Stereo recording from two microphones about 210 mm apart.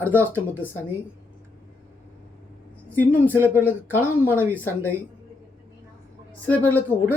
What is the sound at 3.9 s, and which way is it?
Speech, 10° left (ahead or behind).